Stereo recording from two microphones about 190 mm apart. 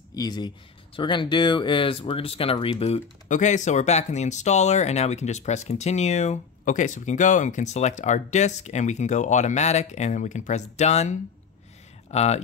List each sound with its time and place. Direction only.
0.1 s speech: 20° left (ahead or behind)